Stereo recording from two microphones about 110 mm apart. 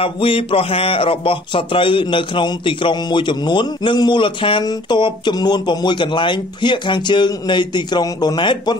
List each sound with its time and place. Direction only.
0.0 s speech: 55° left (ahead or behind)